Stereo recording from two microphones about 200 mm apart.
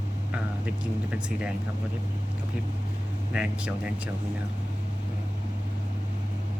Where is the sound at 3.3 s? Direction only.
5° right (ahead or behind).